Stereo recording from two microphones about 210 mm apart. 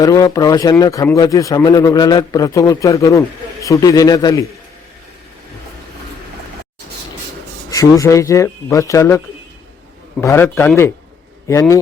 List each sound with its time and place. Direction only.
0.0 s a man's voice: 15° left (ahead or behind)
7.7 s a man's voice: 15° left (ahead or behind)